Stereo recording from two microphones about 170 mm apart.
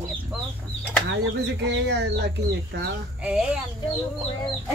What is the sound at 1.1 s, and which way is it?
Speech, 90° right.